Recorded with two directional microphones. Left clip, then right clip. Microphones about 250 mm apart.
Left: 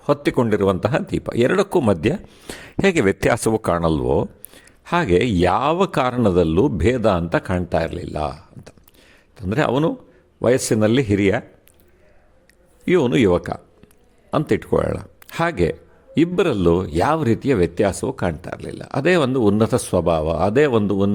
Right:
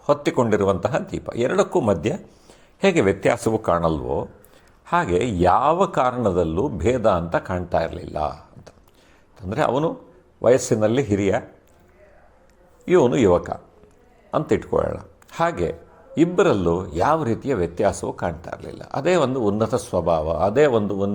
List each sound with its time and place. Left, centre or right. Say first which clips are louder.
0.0 s speech: left 1 dB; left
12.8 s speech: even; left